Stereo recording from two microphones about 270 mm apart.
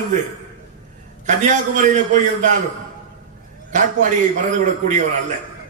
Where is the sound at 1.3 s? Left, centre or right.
Right.